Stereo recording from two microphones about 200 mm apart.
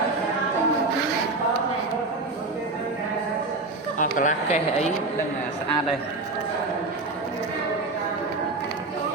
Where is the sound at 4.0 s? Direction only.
40° left (ahead or behind).